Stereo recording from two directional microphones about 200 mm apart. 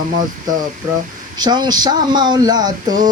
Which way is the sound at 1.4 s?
20° right (ahead or behind).